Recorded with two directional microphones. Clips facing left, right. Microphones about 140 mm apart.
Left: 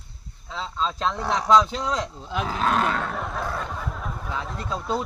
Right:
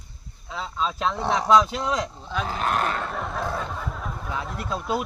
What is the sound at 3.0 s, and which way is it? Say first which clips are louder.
Speech: even; centre (ahead or behind).